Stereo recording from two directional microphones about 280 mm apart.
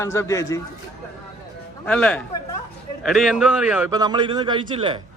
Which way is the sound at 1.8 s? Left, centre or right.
Centre.